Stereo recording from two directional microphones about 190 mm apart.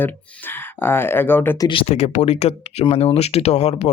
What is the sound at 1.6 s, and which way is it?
Speech, 30° left (ahead or behind).